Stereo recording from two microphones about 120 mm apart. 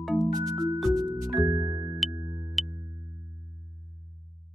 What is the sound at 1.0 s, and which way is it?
Music, 30° right (ahead or behind).